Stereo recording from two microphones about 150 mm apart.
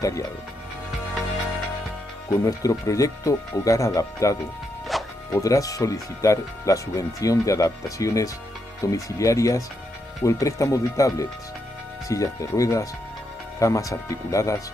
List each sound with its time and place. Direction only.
0.0 s speech: 20° left (ahead or behind)
2.4 s speech: 20° left (ahead or behind)
4.9 s music: centre (ahead or behind)
5.3 s speech: 20° left (ahead or behind)